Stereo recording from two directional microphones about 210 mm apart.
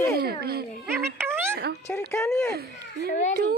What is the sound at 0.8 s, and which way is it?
Speech, 10° right (ahead or behind).